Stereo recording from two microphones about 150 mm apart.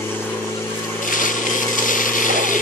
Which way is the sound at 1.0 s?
60° left (ahead or behind).